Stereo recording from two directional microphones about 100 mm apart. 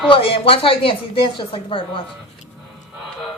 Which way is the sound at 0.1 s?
70° left (ahead or behind).